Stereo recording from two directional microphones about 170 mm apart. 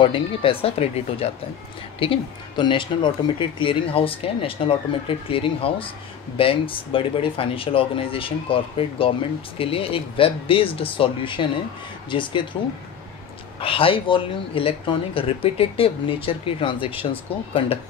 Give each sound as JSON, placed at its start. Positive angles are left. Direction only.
{"t": 0.0, "sound": "speech", "side_deg": 30}
{"t": 13.6, "sound": "speech", "side_deg": 30}